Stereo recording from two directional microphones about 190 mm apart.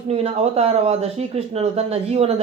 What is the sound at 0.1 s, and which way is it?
Speech, 35° right (ahead or behind).